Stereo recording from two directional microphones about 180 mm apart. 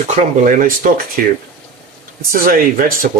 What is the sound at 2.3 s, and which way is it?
Speech, 50° right (ahead or behind).